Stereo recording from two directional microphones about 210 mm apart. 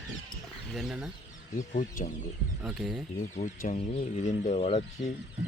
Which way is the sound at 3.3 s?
35° left (ahead or behind).